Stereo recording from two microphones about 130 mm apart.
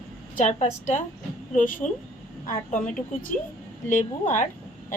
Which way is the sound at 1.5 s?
90° left.